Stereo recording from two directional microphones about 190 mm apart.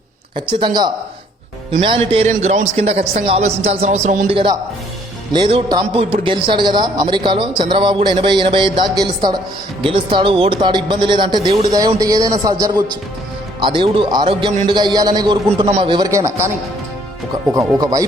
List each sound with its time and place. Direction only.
0.3 s a man's voice: 25° right (ahead or behind); by 4.3 s 40° right (ahead or behind)
4.3 s a man's voice: 30° right (ahead or behind)
17.5 s a man's voice: 20° right (ahead or behind)